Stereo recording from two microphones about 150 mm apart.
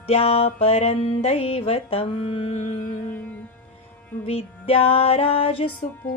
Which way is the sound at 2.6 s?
55° left (ahead or behind).